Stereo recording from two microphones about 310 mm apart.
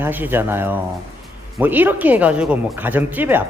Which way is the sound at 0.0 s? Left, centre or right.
Centre.